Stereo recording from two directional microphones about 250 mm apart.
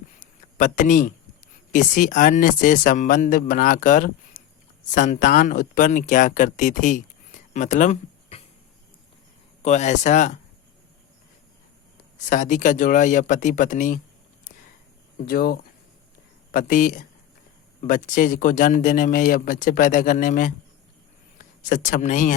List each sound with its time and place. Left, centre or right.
0.2 s a sound: left
1.7 s speech: left
7.5 s a sound: left
9.6 s speech: left
12.3 s speech: left
15.3 s speech: left